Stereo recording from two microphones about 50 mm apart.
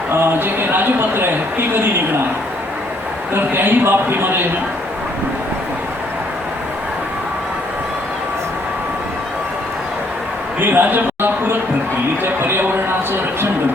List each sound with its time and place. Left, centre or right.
0.1 s speech: right
3.3 s speech: right
10.6 s a man's voice: right
12.2 s a sound: right